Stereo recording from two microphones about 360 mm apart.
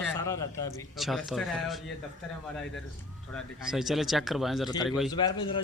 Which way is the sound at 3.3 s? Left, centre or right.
Centre.